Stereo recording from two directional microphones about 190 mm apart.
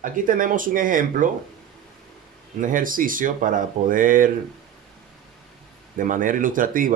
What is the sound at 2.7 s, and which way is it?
Speech, 45° right (ahead or behind).